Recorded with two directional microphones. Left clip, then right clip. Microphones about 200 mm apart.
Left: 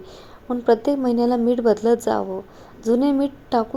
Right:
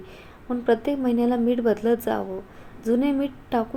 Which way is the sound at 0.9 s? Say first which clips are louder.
Left 4 dB; 10° left (ahead or behind).